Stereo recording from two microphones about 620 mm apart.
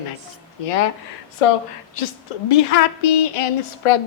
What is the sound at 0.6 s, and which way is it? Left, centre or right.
A woman's voice, left.